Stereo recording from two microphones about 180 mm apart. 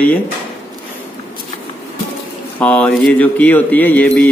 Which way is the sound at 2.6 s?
10° left (ahead or behind).